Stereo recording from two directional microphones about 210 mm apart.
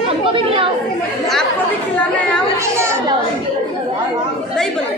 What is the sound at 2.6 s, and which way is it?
Children playing, 15° right (ahead or behind).